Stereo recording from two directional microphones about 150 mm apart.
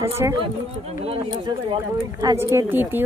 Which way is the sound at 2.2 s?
20° right (ahead or behind).